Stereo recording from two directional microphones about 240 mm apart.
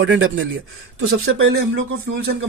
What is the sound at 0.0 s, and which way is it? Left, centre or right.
Speech, right.